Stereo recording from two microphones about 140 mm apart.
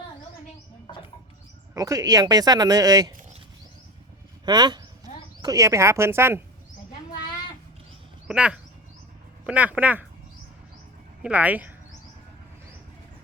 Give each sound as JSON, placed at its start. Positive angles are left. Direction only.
{"t": 1.7, "sound": "speech", "side_deg": -25}
{"t": 4.4, "sound": "speech", "side_deg": -30}
{"t": 8.3, "sound": "speech", "side_deg": -5}
{"t": 11.2, "sound": "speech", "side_deg": -10}